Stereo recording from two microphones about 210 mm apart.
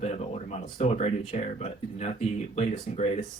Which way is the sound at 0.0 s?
30° left (ahead or behind).